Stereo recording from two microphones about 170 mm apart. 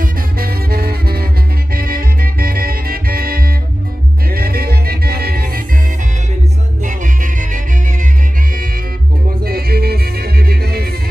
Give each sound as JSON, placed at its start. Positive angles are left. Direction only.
{"t": 0.0, "sound": "music", "side_deg": -65}
{"t": 6.8, "sound": "music", "side_deg": -50}
{"t": 9.4, "sound": "music", "side_deg": -65}